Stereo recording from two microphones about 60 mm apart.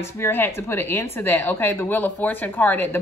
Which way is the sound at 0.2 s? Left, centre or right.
Left.